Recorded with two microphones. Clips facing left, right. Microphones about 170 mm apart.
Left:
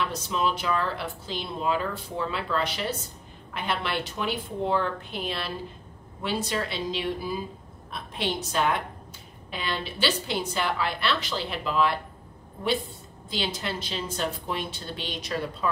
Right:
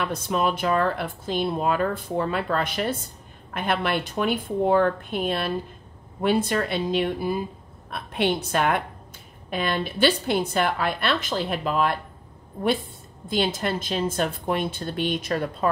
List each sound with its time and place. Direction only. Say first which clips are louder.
0.0 s a woman's voice: right 3 dB; 55° right (ahead or behind)
13.3 s speech: right 7 dB; 50° right (ahead or behind)